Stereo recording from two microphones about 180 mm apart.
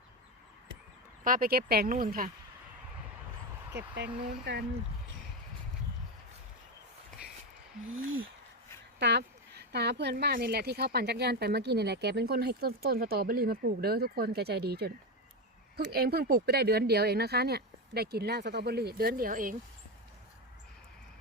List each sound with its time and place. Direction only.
1.2 s speech: 50° right (ahead or behind)
3.8 s speech: 65° right (ahead or behind)
4.1 s speech: 5° right (ahead or behind)
7.9 s a sound: 90° right
9.0 s speech: 70° right (ahead or behind); by 19.5 s 50° right (ahead or behind)